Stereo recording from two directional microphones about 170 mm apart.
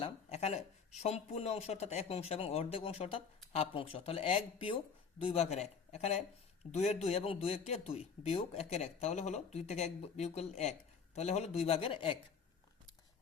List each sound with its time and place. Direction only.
0.0 s speech: 40° left (ahead or behind)